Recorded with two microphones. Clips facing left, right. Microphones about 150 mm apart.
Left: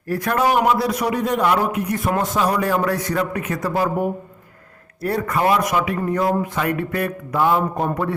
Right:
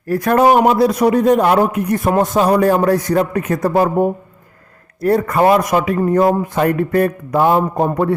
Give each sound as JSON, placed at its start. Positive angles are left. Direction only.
{"t": 0.1, "sound": "a man's voice", "side_deg": -45}
{"t": 5.0, "sound": "speech", "side_deg": -40}